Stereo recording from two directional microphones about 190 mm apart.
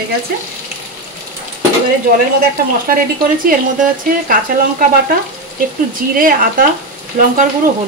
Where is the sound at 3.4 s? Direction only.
45° right (ahead or behind).